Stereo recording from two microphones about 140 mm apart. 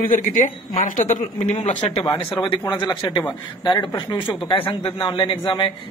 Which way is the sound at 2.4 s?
25° left (ahead or behind).